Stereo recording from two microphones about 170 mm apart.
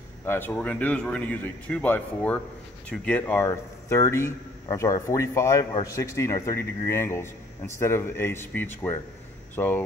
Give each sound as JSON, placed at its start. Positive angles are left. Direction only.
{"t": 0.2, "sound": "a man's voice", "side_deg": 10}